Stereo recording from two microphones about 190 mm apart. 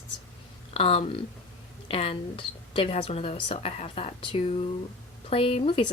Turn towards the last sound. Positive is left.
turn(degrees=30)  # may be behind; listen again after turning